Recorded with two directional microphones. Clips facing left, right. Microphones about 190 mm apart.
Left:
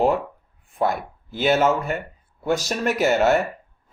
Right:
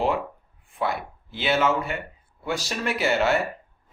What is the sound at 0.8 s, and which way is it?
Speech, 45° left (ahead or behind).